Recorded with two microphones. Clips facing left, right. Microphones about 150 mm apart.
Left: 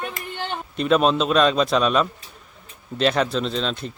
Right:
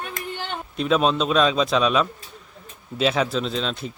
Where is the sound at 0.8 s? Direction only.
Centre (ahead or behind).